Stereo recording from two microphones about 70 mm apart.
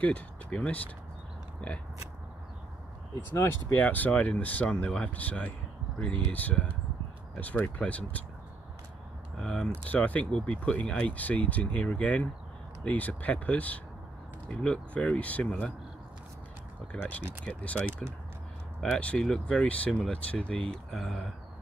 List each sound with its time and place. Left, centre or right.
0.0 s speech: centre
3.7 s speech: left
9.4 s speech: centre
9.8 s speech: left
17.5 s speech: left
20.9 s speech: centre